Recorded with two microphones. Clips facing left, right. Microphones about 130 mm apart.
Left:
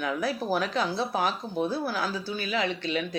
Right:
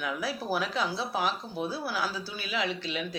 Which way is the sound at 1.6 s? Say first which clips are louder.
Left 7 dB; 50° left (ahead or behind).